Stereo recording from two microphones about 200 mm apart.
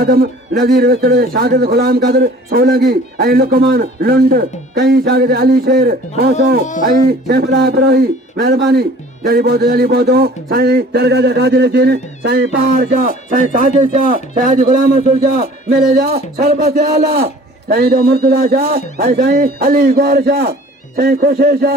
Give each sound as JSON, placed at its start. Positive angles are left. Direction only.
{"t": 0.0, "sound": "a man's voice", "side_deg": -50}